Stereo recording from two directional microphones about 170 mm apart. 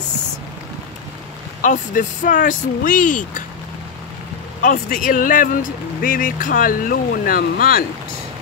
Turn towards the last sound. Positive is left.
turn(degrees=60)  # may be behind; listen again after turning